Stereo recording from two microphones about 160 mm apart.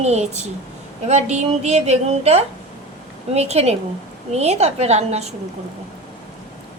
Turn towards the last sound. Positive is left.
turn(degrees=-45)  # may be behind; listen again after turning